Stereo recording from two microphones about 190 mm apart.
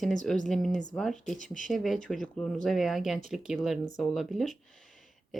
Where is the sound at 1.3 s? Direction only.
40° left (ahead or behind).